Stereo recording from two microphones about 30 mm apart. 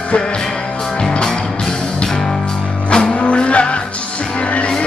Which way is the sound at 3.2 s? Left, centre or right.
Left.